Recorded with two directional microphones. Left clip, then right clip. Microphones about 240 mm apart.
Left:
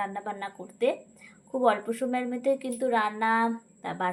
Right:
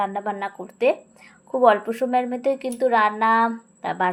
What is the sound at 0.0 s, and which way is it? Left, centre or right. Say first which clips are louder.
A woman's voice: right 8 dB; right.